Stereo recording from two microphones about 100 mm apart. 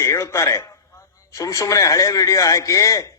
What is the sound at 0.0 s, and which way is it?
A man's voice, 30° left (ahead or behind).